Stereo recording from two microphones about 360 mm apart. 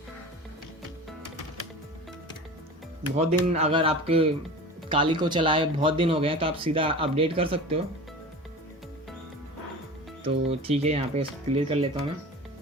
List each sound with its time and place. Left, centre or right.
3.2 s speech: centre
10.2 s speech: centre